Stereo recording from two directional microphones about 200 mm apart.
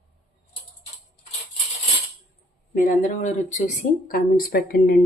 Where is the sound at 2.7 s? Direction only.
40° left (ahead or behind).